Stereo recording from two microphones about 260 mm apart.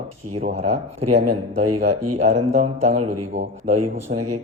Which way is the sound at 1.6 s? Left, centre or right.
Right.